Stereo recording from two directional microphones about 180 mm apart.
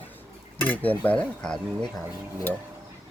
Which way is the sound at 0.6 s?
10° left (ahead or behind).